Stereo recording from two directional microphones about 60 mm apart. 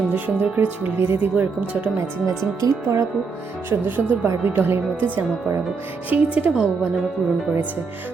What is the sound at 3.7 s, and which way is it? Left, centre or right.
Speech, right.